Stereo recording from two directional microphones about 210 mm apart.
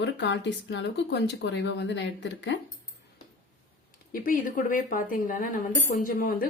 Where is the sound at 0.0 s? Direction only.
60° left (ahead or behind).